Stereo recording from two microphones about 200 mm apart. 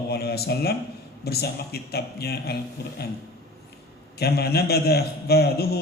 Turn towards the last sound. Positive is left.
turn(degrees=50)  # may be behind; listen again after turning